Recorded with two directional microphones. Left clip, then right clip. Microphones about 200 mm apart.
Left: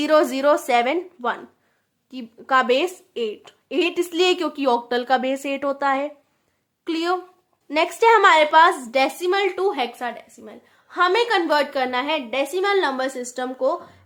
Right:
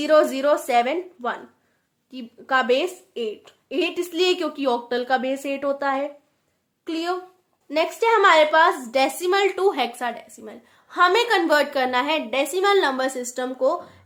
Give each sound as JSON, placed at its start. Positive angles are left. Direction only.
{"t": 0.0, "sound": "a woman's voice", "side_deg": 25}